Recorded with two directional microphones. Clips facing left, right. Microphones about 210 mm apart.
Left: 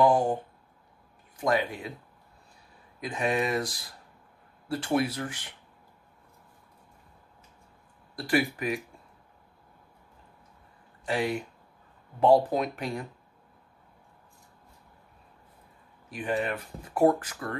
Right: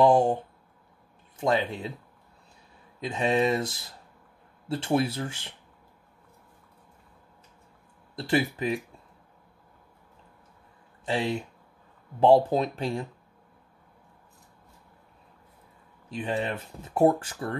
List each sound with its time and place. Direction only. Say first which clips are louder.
0.0 s speech: right 3 dB; 25° right (ahead or behind)
1.4 s speech: right 1 dB; 25° right (ahead or behind)
3.0 s speech: right 3 dB; 25° right (ahead or behind)
8.2 s speech: right 1 dB; 25° right (ahead or behind)
11.1 s speech: right 1 dB; 25° right (ahead or behind)
16.1 s speech: even; 25° right (ahead or behind)